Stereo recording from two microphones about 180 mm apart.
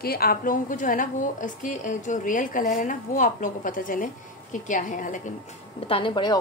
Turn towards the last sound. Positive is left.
turn(degrees=25)  # may be behind; listen again after turning